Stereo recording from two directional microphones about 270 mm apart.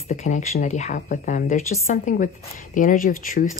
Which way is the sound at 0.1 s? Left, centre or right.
Left.